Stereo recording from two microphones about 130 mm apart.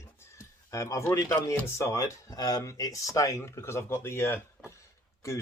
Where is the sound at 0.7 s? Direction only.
25° left (ahead or behind).